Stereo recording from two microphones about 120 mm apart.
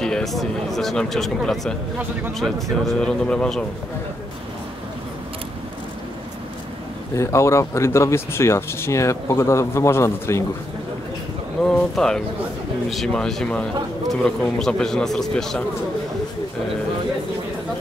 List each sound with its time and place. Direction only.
0.0 s speech: 5° left (ahead or behind)
7.2 s speech: 25° left (ahead or behind)
11.6 s speech: 5° left (ahead or behind)